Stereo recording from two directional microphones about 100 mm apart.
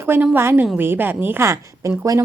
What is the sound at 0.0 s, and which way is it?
A woman's voice, 25° right (ahead or behind).